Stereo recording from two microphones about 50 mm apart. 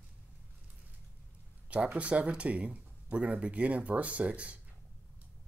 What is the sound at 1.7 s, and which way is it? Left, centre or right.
Speech, right.